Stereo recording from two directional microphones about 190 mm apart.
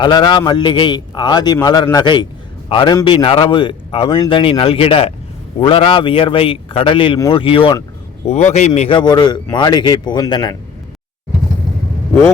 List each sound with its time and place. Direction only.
0.0 s a man's voice: 25° left (ahead or behind)